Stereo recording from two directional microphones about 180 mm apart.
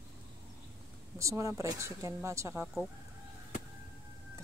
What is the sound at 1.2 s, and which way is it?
Speech, 15° right (ahead or behind).